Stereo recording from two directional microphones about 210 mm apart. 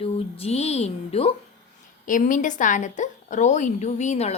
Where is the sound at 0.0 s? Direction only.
30° left (ahead or behind).